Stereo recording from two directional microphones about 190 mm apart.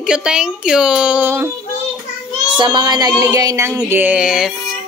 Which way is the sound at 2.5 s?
25° right (ahead or behind).